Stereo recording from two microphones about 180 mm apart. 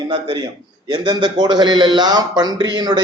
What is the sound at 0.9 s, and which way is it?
A man's voice, 25° right (ahead or behind).